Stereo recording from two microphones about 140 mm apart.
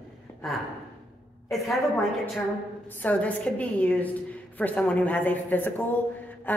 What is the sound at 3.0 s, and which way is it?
A woman's voice, 10° left (ahead or behind).